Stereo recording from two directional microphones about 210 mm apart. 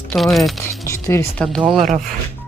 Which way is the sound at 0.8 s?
15° left (ahead or behind).